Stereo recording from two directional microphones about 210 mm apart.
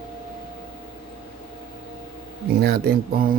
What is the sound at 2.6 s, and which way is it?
Mantra, 50° right (ahead or behind).